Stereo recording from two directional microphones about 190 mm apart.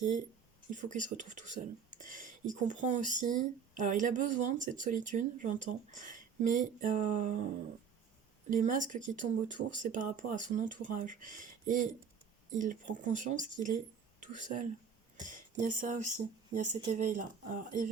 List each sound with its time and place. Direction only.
0.7 s speech: 40° right (ahead or behind)
15.2 s a sound: 45° right (ahead or behind)
15.6 s speech: 45° right (ahead or behind)